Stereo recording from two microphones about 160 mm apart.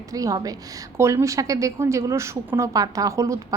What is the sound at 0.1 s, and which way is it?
A woman's voice, 20° right (ahead or behind).